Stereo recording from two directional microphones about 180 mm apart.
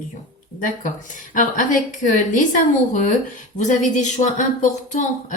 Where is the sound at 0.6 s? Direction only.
45° left (ahead or behind).